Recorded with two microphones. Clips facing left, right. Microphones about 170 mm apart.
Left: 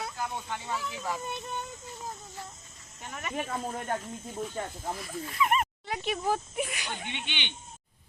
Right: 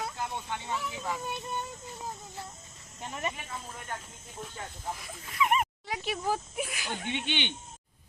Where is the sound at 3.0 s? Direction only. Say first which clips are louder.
Right 5 dB; 25° right (ahead or behind).